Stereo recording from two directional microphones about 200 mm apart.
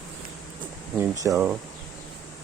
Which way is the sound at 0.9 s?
15° right (ahead or behind).